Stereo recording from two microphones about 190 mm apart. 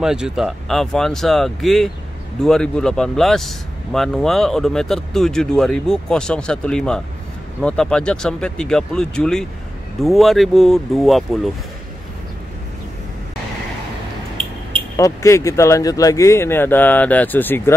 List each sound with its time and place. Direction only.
0.0 s speech: 5° right (ahead or behind)
14.3 s a sound: 30° right (ahead or behind)
15.0 s speech: 15° left (ahead or behind)